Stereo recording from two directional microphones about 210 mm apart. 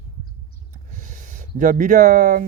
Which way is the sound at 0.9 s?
40° right (ahead or behind).